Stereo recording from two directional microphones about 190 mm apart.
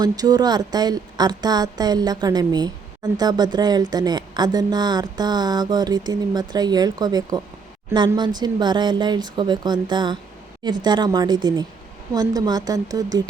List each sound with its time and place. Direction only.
0.0 s a woman's voice: 20° right (ahead or behind)